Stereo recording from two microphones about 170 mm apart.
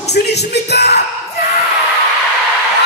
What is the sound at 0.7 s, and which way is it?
Speech, 75° left (ahead or behind).